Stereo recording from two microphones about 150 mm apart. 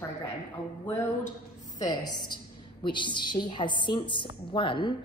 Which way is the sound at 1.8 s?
30° left (ahead or behind).